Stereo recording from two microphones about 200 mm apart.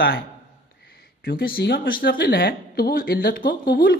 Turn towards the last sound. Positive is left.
turn(degrees=50)  # may be behind; listen again after turning